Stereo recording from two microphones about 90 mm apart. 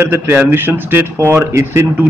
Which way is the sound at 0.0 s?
25° right (ahead or behind).